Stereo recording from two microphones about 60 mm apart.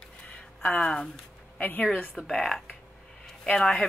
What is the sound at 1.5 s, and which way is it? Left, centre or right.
Speech, left.